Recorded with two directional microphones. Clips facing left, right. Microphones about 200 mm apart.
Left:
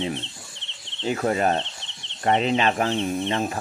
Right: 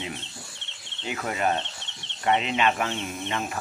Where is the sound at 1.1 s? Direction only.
35° left (ahead or behind).